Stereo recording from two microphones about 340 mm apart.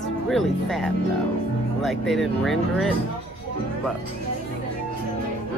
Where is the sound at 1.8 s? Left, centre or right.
Centre.